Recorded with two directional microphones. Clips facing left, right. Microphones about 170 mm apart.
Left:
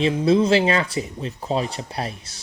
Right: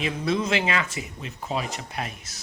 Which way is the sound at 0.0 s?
30° left (ahead or behind).